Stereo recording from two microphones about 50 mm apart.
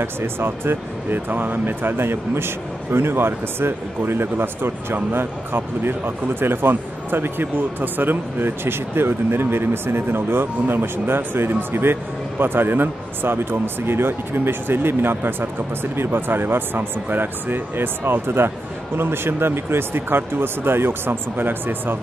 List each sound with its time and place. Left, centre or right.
0.0 s speech: right